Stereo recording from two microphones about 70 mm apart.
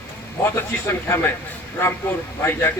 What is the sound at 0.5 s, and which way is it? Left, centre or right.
Speech, left.